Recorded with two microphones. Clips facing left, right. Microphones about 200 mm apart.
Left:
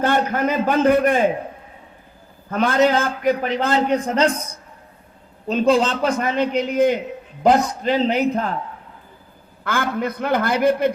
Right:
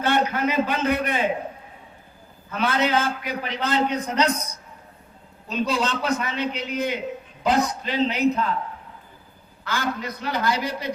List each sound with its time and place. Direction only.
0.0 s a man's voice: 45° left (ahead or behind)
2.5 s a man's voice: 45° left (ahead or behind)
5.5 s a man's voice: 50° left (ahead or behind)
9.6 s a man's voice: 55° left (ahead or behind)